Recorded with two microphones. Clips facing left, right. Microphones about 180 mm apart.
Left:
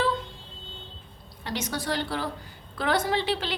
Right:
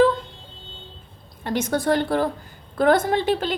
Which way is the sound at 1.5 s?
50° right (ahead or behind).